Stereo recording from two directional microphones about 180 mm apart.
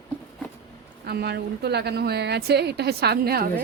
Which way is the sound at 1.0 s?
65° right (ahead or behind).